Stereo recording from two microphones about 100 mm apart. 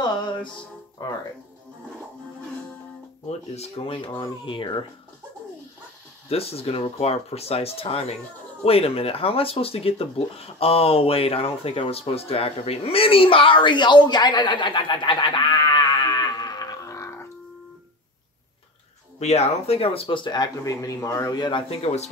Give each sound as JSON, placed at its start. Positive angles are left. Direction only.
{"t": 0.0, "sound": "music", "side_deg": 50}
{"t": 1.0, "sound": "speech", "side_deg": 40}
{"t": 3.5, "sound": "speech", "side_deg": 80}
{"t": 4.1, "sound": "speech", "side_deg": 50}
{"t": 6.2, "sound": "speech", "side_deg": 80}
{"t": 19.1, "sound": "speech", "side_deg": 90}
{"t": 20.6, "sound": "speech", "side_deg": 35}
{"t": 21.4, "sound": "speech", "side_deg": 55}
{"t": 21.6, "sound": "speech", "side_deg": 90}